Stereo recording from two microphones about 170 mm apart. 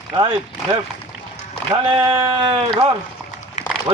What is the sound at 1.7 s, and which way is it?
Speech, 30° right (ahead or behind).